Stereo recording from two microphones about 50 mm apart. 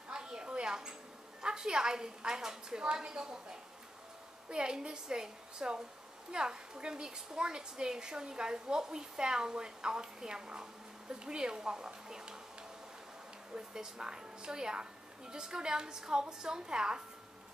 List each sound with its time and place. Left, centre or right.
0.1 s a sound: centre
1.4 s a woman's voice: centre
4.5 s a woman's voice: centre
13.6 s a woman's voice: centre